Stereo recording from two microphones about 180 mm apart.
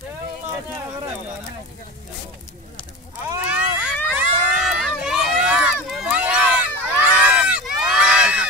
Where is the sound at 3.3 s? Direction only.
5° right (ahead or behind).